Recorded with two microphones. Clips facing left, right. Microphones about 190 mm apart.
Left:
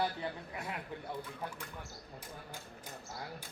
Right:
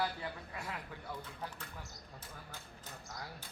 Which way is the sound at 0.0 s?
20° left (ahead or behind).